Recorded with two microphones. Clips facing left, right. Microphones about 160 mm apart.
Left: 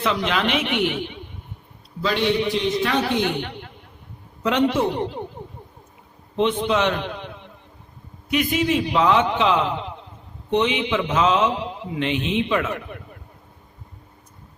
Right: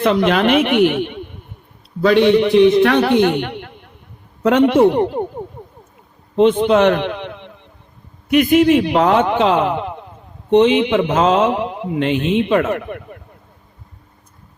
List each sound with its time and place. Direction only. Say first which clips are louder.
0.0 s a man's voice: right 8 dB; 50° right (ahead or behind)
6.6 s a man's voice: right 8 dB; 55° right (ahead or behind); by 7.5 s 70° right (ahead or behind)
8.3 s a man's voice: right 9 dB; 60° right (ahead or behind)
10.5 s a man's voice: right 9 dB; 40° right (ahead or behind)
10.8 s a man's voice: right 6 dB; 55° right (ahead or behind)